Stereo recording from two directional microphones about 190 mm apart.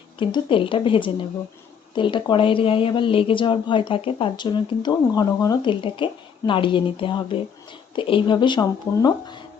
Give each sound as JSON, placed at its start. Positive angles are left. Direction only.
{"t": 0.2, "sound": "speech", "side_deg": 25}